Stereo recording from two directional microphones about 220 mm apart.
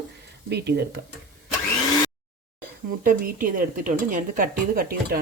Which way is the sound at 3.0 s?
40° right (ahead or behind).